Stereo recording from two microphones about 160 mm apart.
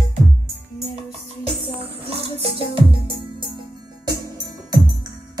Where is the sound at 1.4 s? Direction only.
35° right (ahead or behind).